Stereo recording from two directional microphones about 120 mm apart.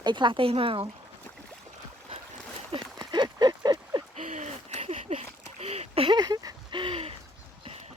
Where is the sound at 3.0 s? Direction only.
35° right (ahead or behind).